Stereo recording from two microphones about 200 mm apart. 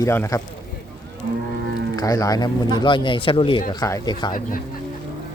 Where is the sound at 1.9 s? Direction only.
20° left (ahead or behind).